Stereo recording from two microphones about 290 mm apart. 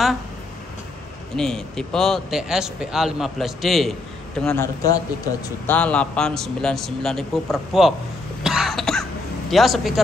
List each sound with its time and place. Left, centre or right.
1.3 s a man's voice: centre
8.5 s throat clearing: centre
9.5 s a man's voice: centre